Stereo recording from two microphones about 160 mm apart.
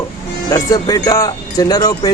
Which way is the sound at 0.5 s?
20° left (ahead or behind).